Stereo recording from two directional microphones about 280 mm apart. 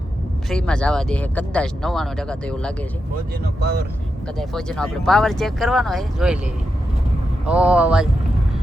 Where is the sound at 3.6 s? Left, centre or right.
Right.